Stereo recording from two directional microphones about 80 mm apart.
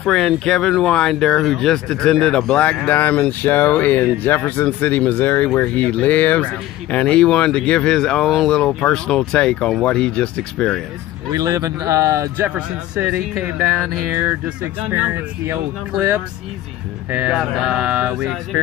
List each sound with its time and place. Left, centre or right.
0.0 s speech: centre
8.5 s speech: centre
11.3 s speech: right
12.4 s speech: right
14.9 s speech: right
17.1 s speech: centre
18.2 s speech: centre